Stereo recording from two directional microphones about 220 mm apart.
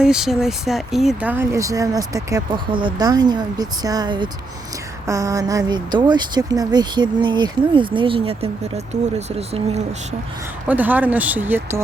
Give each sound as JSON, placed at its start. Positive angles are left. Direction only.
{"t": 0.0, "sound": "speech", "side_deg": -5}
{"t": 10.7, "sound": "speech", "side_deg": -5}